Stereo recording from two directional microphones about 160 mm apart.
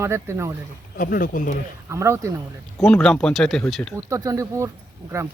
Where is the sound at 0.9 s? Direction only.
60° left (ahead or behind).